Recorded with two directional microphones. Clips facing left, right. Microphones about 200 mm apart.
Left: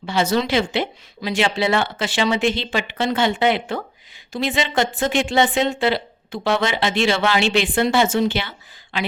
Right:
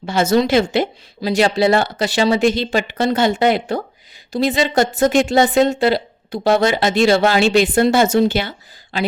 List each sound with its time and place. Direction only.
0.0 s a woman's voice: 45° right (ahead or behind)